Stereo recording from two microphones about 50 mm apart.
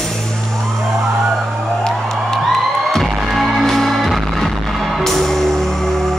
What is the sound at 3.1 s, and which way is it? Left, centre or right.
Music, centre.